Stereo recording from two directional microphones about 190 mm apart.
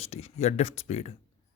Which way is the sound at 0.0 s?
35° left (ahead or behind).